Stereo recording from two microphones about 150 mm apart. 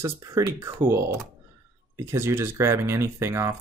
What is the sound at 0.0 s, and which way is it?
Speech, 20° right (ahead or behind).